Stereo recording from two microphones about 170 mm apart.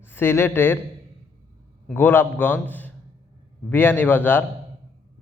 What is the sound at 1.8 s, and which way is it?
A man's voice, 10° left (ahead or behind).